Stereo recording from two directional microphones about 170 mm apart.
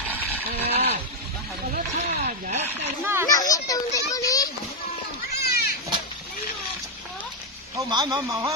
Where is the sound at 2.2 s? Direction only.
50° right (ahead or behind).